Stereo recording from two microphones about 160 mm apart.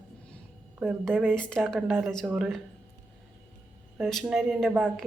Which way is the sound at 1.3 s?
5° left (ahead or behind).